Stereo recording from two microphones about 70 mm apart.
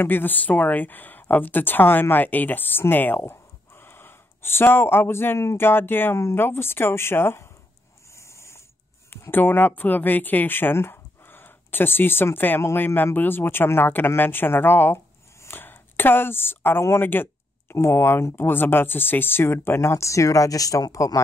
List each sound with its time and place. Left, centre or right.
0.0 s speech: left
8.1 s snoring: left
9.1 s speech: left
15.4 s a sound: left
17.0 s speech: left